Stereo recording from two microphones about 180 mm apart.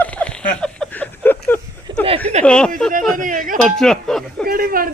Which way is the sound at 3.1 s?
45° right (ahead or behind).